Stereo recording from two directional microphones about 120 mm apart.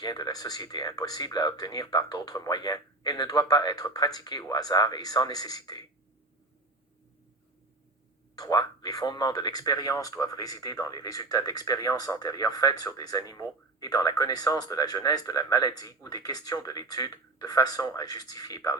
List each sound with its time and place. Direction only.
0.0 s speech: 35° left (ahead or behind)
8.4 s speech: 30° left (ahead or behind)